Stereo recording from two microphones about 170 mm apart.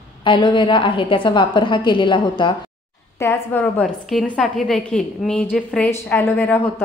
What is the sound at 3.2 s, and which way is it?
A woman's voice, 10° left (ahead or behind).